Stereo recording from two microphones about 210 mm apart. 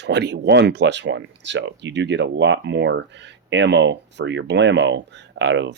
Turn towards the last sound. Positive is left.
turn(degrees=-60)  # may be behind; listen again after turning